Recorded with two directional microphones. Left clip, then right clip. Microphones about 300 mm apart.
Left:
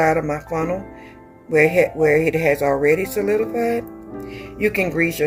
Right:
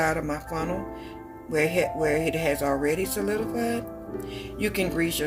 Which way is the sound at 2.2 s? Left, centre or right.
Right.